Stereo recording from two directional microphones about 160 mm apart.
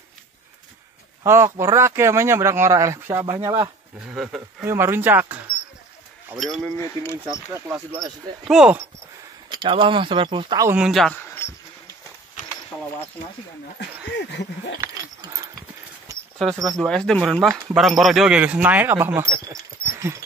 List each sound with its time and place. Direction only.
1.2 s speech: 15° right (ahead or behind)
4.1 s speech: 5° right (ahead or behind)
4.6 s speech: 15° right (ahead or behind)
6.4 s speech: centre (ahead or behind)
6.8 s speech: 15° left (ahead or behind)
8.5 s speech: 5° right (ahead or behind)
9.5 s speech: 30° right (ahead or behind)
10.7 s speech: 5° right (ahead or behind)
11.2 s a sound: 15° left (ahead or behind)
14.1 s a sound: 90° left
14.8 s a sound: 20° right (ahead or behind)
16.4 s speech: 20° right (ahead or behind)
16.7 s speech: 5° left (ahead or behind); by 20.2 s 15° right (ahead or behind)